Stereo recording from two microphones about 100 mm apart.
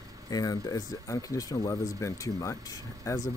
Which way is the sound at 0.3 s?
40° left (ahead or behind).